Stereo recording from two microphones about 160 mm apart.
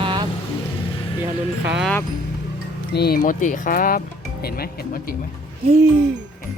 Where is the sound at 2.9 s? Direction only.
80° left.